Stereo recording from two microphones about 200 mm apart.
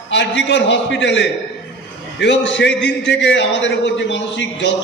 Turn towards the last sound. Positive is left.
turn(degrees=65)  # may be behind; listen again after turning